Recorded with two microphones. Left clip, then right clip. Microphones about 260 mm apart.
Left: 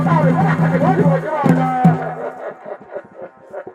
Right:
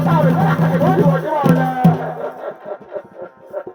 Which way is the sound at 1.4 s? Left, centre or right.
Right.